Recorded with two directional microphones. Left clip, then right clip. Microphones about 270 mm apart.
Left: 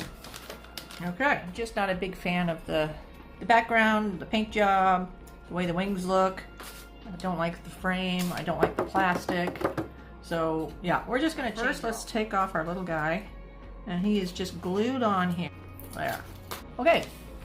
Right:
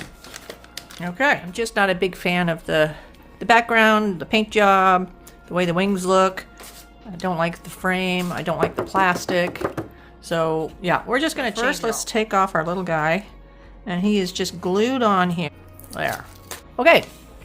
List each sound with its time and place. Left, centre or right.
1.0 s speech: right
9.6 s speech: centre
10.2 s speech: right
16.7 s speech: right